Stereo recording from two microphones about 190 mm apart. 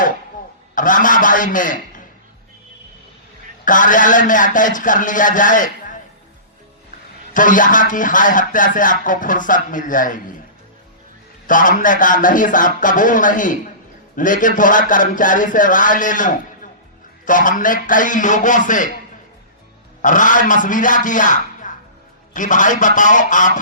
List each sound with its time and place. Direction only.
0.8 s a man's voice: 45° left (ahead or behind)
3.7 s speech: 45° left (ahead or behind)
7.3 s speech: 45° left (ahead or behind)
11.4 s speech: 45° left (ahead or behind)
20.0 s a man's voice: 45° left (ahead or behind)